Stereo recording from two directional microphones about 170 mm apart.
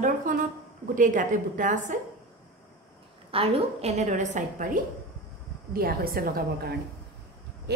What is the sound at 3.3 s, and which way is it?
A woman's voice, 35° right (ahead or behind).